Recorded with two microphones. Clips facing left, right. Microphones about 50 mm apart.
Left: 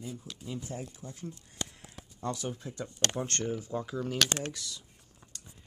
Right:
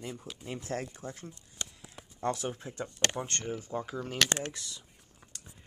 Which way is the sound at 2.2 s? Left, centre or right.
Right.